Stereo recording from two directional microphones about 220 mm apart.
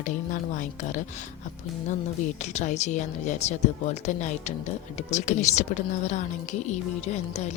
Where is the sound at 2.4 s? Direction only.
30° left (ahead or behind).